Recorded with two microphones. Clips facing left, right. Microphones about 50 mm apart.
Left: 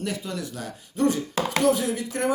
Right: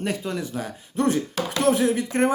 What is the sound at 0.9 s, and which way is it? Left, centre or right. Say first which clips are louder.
Speech: right 1 dB; right.